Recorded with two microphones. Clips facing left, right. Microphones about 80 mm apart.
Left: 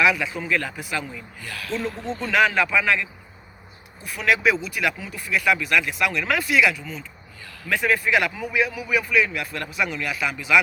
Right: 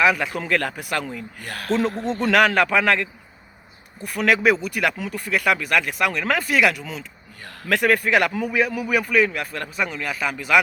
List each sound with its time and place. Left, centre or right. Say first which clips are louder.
0.0 s speech: right 2 dB; right
2.0 s speech: right 2 dB; right
7.7 s speech: right 3 dB; right